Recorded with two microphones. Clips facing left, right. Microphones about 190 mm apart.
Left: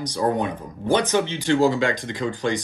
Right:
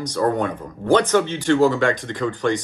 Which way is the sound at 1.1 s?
50° right (ahead or behind).